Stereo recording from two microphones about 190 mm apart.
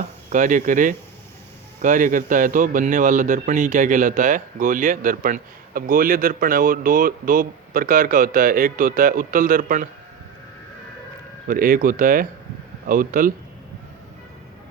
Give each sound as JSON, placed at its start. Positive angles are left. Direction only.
{"t": 0.3, "sound": "a man's voice", "side_deg": -45}
{"t": 11.4, "sound": "a man's voice", "side_deg": -45}